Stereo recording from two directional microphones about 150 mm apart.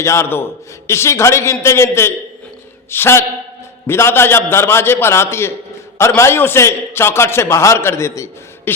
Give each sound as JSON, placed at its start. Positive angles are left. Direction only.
{"t": 0.0, "sound": "a man's voice", "side_deg": 20}